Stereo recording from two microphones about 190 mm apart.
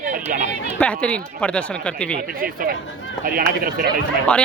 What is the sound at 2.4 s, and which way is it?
Speech, 50° right (ahead or behind).